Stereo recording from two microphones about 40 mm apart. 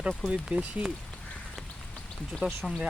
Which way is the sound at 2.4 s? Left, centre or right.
Right.